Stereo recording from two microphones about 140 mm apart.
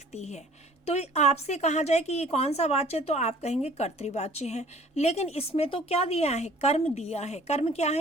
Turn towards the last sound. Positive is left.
turn(degrees=50)  # may be behind; listen again after turning